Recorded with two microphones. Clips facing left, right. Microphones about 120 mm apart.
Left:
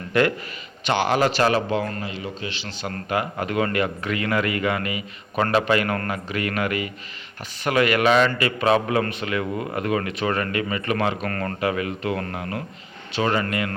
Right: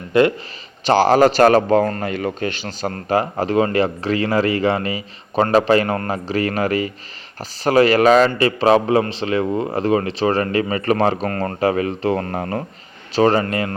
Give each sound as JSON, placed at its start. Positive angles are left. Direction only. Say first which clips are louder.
{"t": 0.1, "sound": "a man's voice", "louder": "right 5 dB", "side_deg": -25}
{"t": 0.9, "sound": "a man's voice", "louder": "right 7 dB", "side_deg": -35}